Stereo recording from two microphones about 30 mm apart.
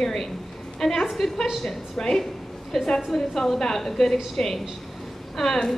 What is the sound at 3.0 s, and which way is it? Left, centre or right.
A woman's voice, centre.